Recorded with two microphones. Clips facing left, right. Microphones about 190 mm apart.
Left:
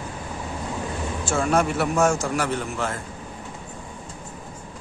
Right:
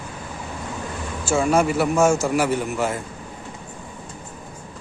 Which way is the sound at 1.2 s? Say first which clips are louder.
Right 3 dB; centre (ahead or behind).